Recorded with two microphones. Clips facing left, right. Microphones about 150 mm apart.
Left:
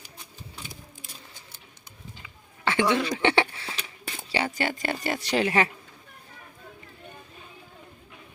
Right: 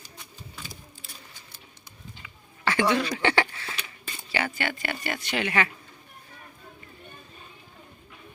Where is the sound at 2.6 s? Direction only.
20° left (ahead or behind).